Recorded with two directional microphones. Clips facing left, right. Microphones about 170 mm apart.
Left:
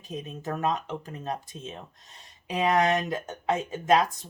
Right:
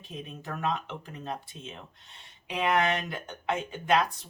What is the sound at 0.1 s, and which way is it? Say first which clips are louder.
Speech: left 5 dB; 40° left (ahead or behind).